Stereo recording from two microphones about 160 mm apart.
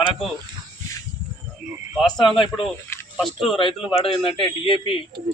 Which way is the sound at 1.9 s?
5° left (ahead or behind).